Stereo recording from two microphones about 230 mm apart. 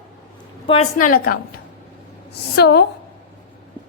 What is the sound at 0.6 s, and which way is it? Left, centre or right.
Speech, left.